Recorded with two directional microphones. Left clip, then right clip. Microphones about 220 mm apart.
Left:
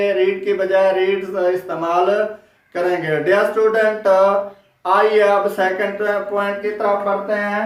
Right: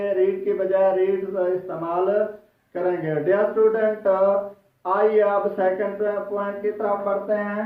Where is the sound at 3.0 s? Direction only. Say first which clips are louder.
Left 5 dB; 15° left (ahead or behind).